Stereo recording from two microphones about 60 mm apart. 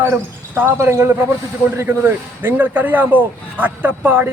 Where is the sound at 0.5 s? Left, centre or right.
Right.